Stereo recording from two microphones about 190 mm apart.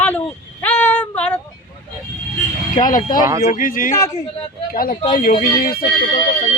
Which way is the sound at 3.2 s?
15° right (ahead or behind).